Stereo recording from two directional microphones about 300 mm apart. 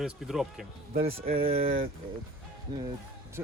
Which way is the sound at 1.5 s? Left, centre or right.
Centre.